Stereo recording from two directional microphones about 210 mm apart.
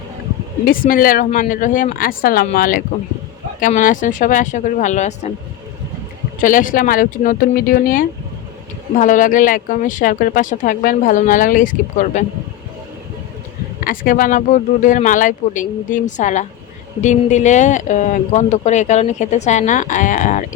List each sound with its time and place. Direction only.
0.6 s speech: 40° left (ahead or behind)
6.4 s speech: 40° left (ahead or behind)
13.8 s speech: 40° left (ahead or behind)